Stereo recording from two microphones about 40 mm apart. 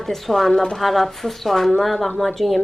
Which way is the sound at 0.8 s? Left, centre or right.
Centre.